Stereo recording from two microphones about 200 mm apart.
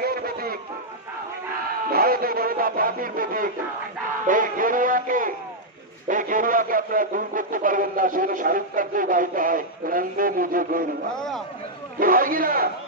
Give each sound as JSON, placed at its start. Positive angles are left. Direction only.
{"t": 0.0, "sound": "a sound", "side_deg": -50}
{"t": 1.9, "sound": "a man's voice", "side_deg": -50}
{"t": 11.1, "sound": "speech", "side_deg": 0}
{"t": 12.0, "sound": "a man's voice", "side_deg": -45}